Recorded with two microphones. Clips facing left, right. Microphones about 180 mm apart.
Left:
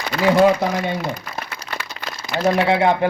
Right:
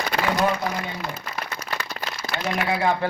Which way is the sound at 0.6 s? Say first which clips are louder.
Left 7 dB; 80° left.